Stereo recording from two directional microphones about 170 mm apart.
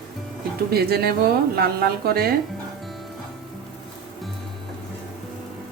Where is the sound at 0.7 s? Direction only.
65° right (ahead or behind).